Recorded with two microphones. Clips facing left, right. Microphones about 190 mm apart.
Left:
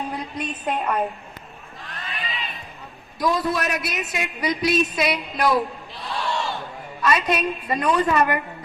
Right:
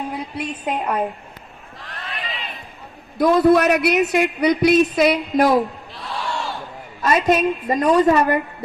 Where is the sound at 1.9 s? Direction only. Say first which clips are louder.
Right 2 dB; 60° right (ahead or behind).